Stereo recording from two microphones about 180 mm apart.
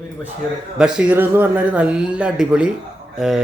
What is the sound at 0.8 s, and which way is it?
A man's voice, 5° right (ahead or behind).